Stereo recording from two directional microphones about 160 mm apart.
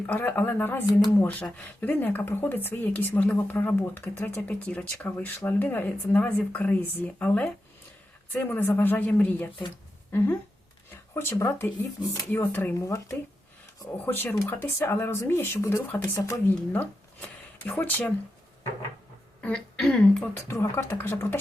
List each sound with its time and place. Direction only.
0.0 s speech: 10° left (ahead or behind)
16.6 s speech: 10° left (ahead or behind)
19.4 s speech: 5° left (ahead or behind)